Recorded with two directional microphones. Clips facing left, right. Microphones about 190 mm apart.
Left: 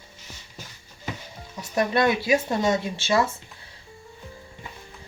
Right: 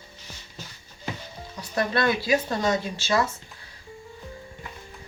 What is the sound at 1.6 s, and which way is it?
Speech, 20° left (ahead or behind).